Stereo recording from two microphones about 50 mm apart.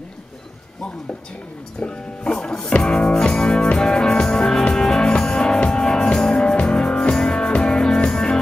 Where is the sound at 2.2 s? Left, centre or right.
Centre.